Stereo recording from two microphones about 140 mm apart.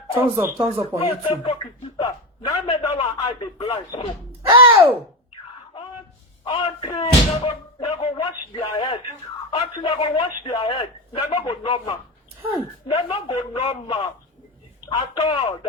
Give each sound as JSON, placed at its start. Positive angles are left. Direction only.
{"t": 0.3, "sound": "speech", "side_deg": -20}
{"t": 0.9, "sound": "a man's voice", "side_deg": 40}
{"t": 4.5, "sound": "music", "side_deg": -40}
{"t": 6.4, "sound": "slam", "side_deg": 35}
{"t": 9.5, "sound": "a man's voice", "side_deg": 35}